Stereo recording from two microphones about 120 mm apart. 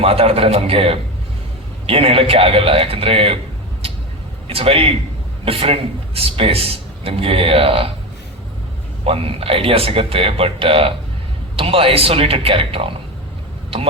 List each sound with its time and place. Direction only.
0.0 s a man's voice: 55° right (ahead or behind)
4.4 s a man's voice: 50° right (ahead or behind)
9.0 s a man's voice: 55° right (ahead or behind)